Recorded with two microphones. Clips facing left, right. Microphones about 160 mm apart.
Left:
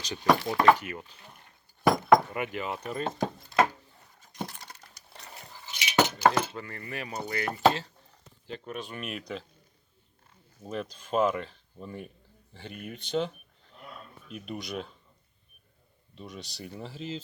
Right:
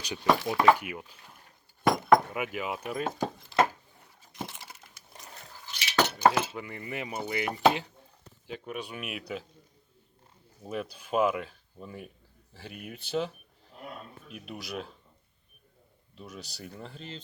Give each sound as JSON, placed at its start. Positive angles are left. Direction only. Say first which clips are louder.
{"t": 0.0, "sound": "speech", "louder": "left 1 dB", "side_deg": -10}
{"t": 1.9, "sound": "wood", "louder": "left 1 dB", "side_deg": 0}
{"t": 4.3, "sound": "a sound", "louder": "left 2 dB", "side_deg": -5}
{"t": 6.2, "sound": "speech", "louder": "even", "side_deg": -10}
{"t": 10.6, "sound": "speech", "louder": "even", "side_deg": -10}
{"t": 16.1, "sound": "speech", "louder": "left 2 dB", "side_deg": 0}